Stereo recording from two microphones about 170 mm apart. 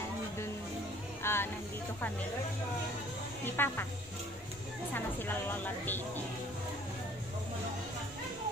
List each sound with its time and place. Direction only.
1.2 s music: 15° left (ahead or behind)
3.4 s a woman's voice: 10° left (ahead or behind)
4.9 s a woman's voice: 10° left (ahead or behind)